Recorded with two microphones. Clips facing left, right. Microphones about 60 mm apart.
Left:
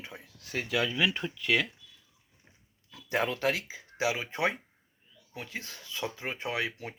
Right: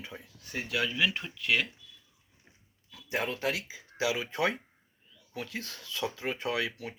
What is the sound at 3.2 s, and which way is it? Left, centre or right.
Speech, left.